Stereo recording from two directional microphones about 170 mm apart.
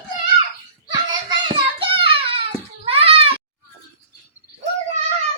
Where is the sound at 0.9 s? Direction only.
25° right (ahead or behind).